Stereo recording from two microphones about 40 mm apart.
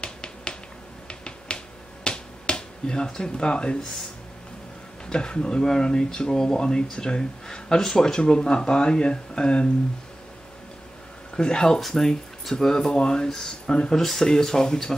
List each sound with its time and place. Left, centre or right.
0.0 s finger snapping: left
3.2 s speech: left
5.1 s speech: left
11.3 s speech: centre